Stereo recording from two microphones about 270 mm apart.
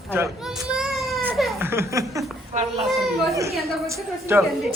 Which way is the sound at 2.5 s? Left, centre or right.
Right.